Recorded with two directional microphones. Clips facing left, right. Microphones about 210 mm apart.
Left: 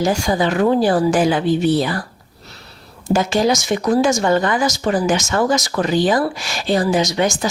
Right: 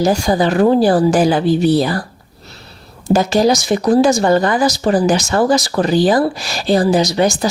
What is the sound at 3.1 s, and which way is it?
Speech, 40° right (ahead or behind).